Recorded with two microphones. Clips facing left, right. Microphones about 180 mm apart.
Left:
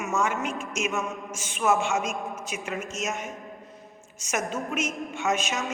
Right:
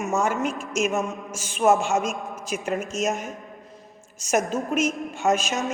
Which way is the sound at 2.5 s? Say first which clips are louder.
Right 10 dB; 35° right (ahead or behind).